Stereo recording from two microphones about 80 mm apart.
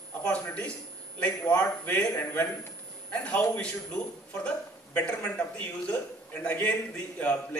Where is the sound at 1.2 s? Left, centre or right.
Centre.